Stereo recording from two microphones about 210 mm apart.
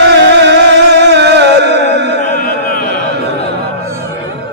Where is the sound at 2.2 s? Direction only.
40° left (ahead or behind).